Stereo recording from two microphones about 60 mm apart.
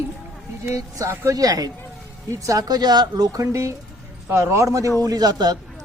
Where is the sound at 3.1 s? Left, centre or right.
Right.